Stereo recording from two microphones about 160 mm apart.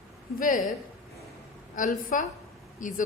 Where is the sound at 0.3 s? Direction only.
60° left (ahead or behind).